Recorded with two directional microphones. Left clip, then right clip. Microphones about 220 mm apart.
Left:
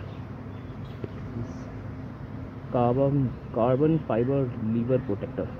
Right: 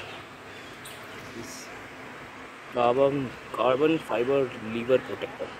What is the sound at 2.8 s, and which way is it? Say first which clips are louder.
Speech: right 2 dB; 10° right (ahead or behind).